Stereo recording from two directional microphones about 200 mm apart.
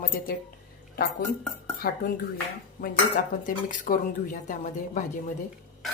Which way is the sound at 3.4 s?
40° left (ahead or behind).